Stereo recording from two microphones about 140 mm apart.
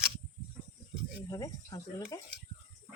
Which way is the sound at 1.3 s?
25° left (ahead or behind).